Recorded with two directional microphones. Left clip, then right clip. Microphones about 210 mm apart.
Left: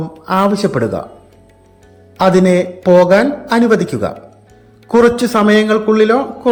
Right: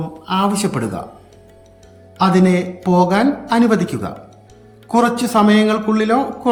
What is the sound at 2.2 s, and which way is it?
A man's voice, 15° left (ahead or behind).